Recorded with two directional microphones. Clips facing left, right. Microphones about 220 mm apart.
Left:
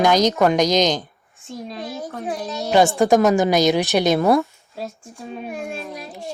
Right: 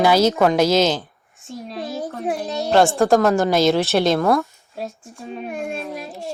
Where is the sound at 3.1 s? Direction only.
15° left (ahead or behind).